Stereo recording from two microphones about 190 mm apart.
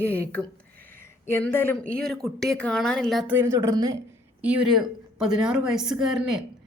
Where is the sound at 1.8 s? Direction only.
50° right (ahead or behind).